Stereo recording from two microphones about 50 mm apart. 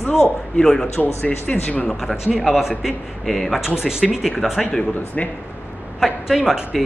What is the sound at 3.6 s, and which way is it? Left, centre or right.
Speech, centre.